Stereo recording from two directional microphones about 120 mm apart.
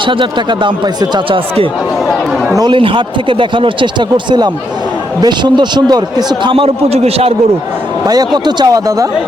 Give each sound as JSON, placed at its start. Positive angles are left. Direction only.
{"t": 0.0, "sound": "speech", "side_deg": -45}
{"t": 6.4, "sound": "speech", "side_deg": -50}
{"t": 8.0, "sound": "speech", "side_deg": -35}